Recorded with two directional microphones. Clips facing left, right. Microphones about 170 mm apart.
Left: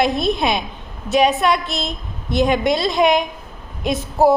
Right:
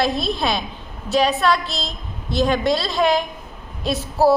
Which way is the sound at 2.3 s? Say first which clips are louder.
Left 2 dB; 15° left (ahead or behind).